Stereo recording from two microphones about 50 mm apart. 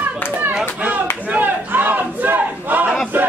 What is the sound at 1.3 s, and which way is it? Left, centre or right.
Battle cry, right.